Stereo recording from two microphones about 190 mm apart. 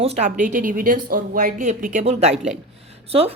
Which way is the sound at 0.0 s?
35° right (ahead or behind).